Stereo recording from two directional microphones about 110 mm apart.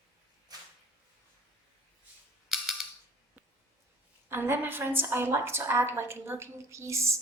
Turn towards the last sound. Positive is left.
turn(degrees=-25)  # may be behind; listen again after turning